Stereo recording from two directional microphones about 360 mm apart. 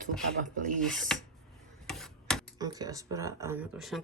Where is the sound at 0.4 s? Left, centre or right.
Right.